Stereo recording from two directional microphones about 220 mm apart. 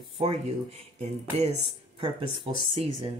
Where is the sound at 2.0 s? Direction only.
25° right (ahead or behind).